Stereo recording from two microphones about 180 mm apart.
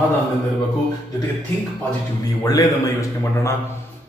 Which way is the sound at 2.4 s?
20° left (ahead or behind).